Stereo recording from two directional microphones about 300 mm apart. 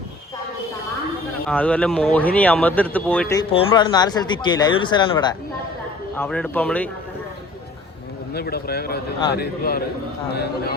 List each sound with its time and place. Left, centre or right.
1.5 s speech: centre
6.1 s a man's voice: centre
8.3 s speech: left